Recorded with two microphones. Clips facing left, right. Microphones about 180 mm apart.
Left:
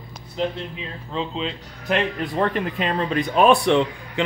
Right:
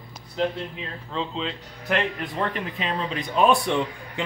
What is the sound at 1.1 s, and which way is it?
Speech, 20° left (ahead or behind).